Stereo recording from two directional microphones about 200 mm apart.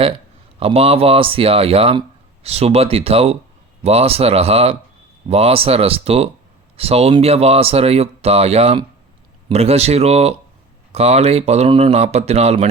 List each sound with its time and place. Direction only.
0.6 s speech: 30° right (ahead or behind)